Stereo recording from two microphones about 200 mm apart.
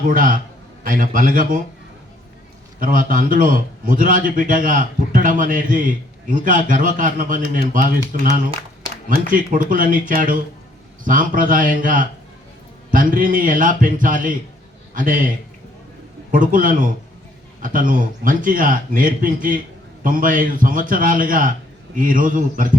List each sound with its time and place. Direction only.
0.1 s a man's voice: 45° right (ahead or behind)
2.8 s a man's voice: 45° right (ahead or behind)
9.0 s a man's voice: 45° right (ahead or behind)
16.3 s a man's voice: 40° right (ahead or behind)